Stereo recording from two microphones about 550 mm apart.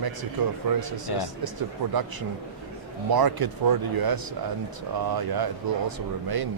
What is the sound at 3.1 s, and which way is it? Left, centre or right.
Speech, right.